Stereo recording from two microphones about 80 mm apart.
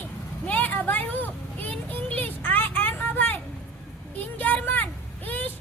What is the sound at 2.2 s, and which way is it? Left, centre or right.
Vehicle, left.